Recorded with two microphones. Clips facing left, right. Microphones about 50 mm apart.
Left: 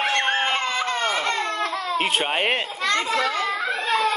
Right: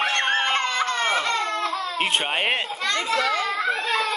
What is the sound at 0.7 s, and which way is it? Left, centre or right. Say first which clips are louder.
Baby laughter: right 1 dB; right.